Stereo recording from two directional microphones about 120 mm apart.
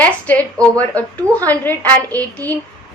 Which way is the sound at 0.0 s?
10° left (ahead or behind).